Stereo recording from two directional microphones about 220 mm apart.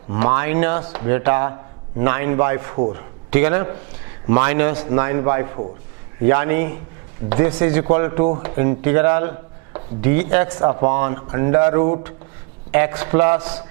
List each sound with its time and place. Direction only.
0.1 s a man's voice: 15° right (ahead or behind)